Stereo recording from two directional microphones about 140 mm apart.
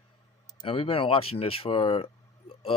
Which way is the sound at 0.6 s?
40° left (ahead or behind).